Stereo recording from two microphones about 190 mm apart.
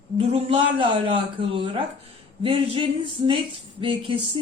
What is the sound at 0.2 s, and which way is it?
Speech, 30° right (ahead or behind).